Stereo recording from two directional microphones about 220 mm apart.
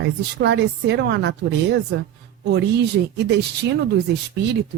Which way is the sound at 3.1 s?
50° right (ahead or behind).